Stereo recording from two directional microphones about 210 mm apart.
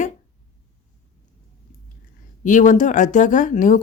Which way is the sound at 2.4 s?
35° left (ahead or behind).